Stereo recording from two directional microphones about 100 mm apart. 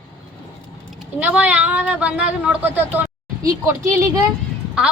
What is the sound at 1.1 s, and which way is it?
Speech, 15° right (ahead or behind).